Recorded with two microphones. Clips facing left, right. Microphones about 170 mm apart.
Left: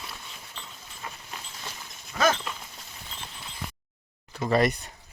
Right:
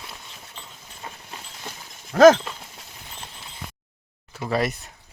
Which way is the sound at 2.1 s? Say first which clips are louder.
Right 13 dB; 90° right.